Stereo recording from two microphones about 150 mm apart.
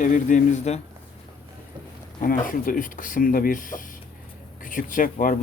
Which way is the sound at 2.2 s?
65° left (ahead or behind).